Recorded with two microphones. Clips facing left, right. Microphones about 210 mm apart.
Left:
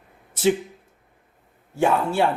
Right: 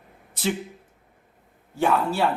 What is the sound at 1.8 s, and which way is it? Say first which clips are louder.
Speech: left 2 dB; 25° left (ahead or behind).